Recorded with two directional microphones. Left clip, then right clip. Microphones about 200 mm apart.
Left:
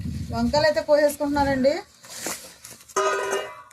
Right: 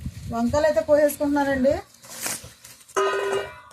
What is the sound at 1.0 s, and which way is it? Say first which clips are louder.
Speech: even; 30° left (ahead or behind).